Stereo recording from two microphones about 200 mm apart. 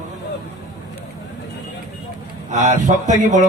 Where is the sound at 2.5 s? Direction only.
40° right (ahead or behind).